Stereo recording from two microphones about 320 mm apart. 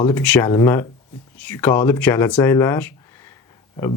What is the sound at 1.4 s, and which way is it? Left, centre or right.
Speech, centre.